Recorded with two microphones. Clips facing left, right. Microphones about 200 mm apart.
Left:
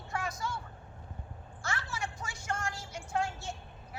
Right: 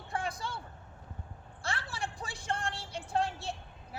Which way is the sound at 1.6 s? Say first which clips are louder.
Even; 30° right (ahead or behind).